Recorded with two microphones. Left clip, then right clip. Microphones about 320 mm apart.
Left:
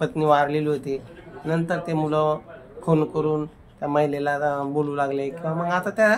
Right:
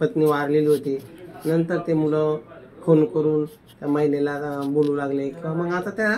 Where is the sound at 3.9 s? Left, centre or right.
Left.